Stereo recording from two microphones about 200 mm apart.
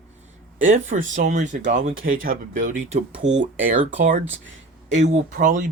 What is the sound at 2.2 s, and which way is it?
Speech, 40° right (ahead or behind).